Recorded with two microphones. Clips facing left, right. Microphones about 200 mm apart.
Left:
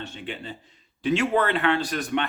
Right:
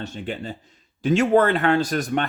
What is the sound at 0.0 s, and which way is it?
Speech, 40° right (ahead or behind).